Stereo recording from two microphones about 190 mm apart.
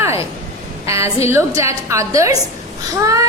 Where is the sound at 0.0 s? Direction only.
15° right (ahead or behind).